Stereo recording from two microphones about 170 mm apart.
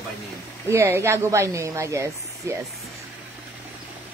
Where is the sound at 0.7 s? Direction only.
15° right (ahead or behind).